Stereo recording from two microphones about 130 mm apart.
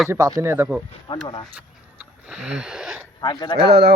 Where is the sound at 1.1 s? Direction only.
40° left (ahead or behind).